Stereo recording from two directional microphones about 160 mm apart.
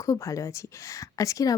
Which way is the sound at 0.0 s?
20° left (ahead or behind).